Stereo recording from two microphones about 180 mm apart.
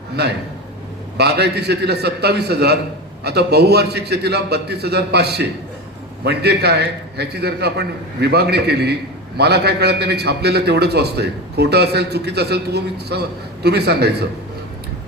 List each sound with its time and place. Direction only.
1.1 s a man's voice: 65° right (ahead or behind)